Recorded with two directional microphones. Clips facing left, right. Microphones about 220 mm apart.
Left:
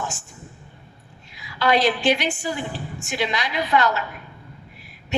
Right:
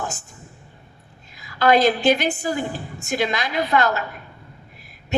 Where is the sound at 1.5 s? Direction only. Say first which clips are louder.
Right 3 dB; 40° right (ahead or behind).